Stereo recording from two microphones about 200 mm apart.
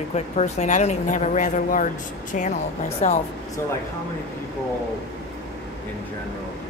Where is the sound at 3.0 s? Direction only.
35° left (ahead or behind).